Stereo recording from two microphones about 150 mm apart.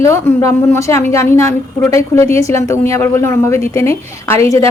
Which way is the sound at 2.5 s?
20° left (ahead or behind).